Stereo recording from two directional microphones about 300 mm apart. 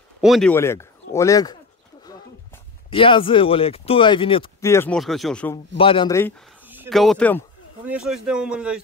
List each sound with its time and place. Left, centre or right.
0.2 s speech: centre
2.9 s speech: centre
5.8 s speech: centre
6.7 s speech: centre